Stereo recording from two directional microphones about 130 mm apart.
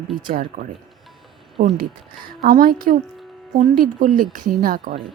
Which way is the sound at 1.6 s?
90° right.